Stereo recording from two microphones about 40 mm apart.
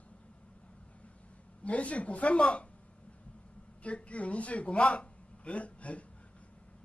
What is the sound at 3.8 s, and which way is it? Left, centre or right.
Speech, left.